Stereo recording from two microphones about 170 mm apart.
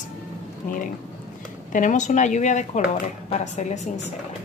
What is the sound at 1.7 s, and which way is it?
A woman's voice, 45° left (ahead or behind).